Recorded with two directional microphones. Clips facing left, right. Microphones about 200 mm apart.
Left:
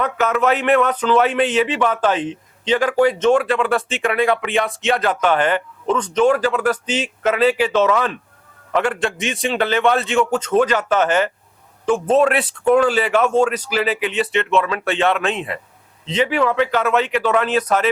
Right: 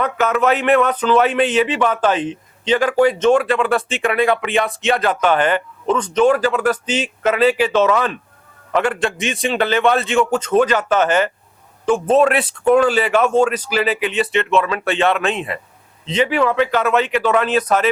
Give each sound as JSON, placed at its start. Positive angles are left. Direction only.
{"t": 0.0, "sound": "speech", "side_deg": -10}